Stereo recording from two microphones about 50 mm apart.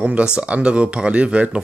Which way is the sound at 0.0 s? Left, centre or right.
Right.